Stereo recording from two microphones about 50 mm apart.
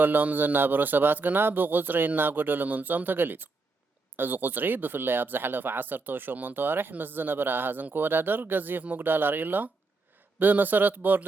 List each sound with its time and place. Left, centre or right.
0.0 s speech: right